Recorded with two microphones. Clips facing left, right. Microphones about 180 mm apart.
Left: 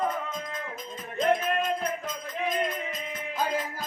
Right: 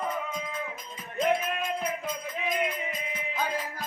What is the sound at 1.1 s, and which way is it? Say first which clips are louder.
Music: left 2 dB; 10° right (ahead or behind).